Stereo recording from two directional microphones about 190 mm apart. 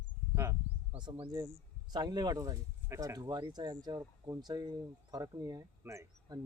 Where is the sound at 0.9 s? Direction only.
25° right (ahead or behind).